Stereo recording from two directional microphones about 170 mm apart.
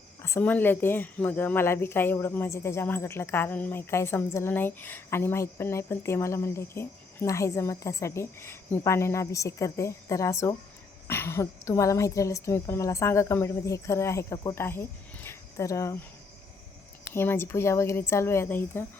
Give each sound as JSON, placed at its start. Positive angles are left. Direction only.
{"t": 0.2, "sound": "speech", "side_deg": 15}
{"t": 17.2, "sound": "speech", "side_deg": 15}